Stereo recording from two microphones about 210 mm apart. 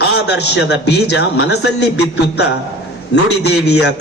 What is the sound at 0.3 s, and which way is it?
A man's voice, 55° left (ahead or behind).